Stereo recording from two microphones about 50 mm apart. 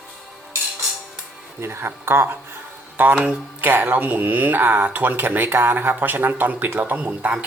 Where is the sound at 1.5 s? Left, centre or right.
Right.